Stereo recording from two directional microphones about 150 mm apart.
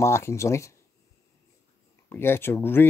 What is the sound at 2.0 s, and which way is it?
Speech, 15° left (ahead or behind).